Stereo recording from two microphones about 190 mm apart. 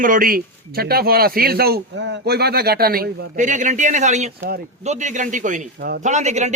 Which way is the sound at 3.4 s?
40° right (ahead or behind).